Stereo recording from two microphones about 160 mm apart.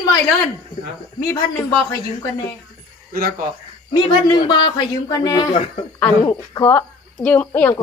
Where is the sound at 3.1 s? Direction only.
65° right (ahead or behind).